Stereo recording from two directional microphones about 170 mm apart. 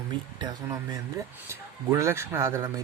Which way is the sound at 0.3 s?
25° right (ahead or behind).